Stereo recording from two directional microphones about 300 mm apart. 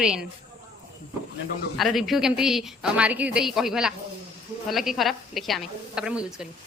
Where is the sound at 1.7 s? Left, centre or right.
Centre.